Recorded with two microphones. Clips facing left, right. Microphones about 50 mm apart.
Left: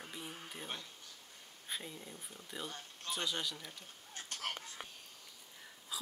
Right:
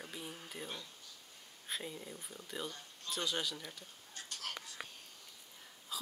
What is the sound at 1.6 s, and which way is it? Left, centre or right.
Speech, centre.